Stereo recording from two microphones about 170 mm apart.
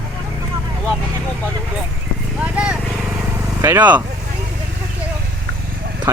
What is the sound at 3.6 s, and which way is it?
Speech, 15° right (ahead or behind).